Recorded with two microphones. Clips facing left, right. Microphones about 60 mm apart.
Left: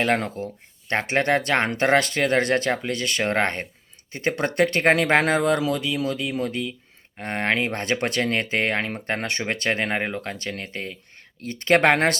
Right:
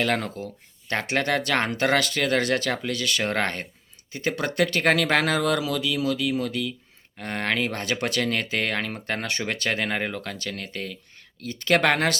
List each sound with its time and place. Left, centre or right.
0.0 s speech: left